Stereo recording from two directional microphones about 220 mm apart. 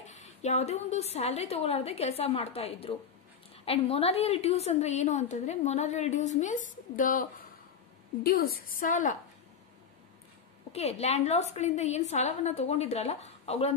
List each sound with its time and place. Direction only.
0.0 s a woman's voice: 30° left (ahead or behind)
10.7 s a woman's voice: 30° left (ahead or behind)